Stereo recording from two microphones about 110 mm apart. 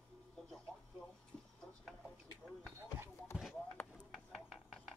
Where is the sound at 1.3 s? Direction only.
10° left (ahead or behind).